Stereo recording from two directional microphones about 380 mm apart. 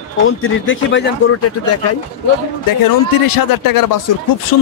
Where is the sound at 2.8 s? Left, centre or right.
Left.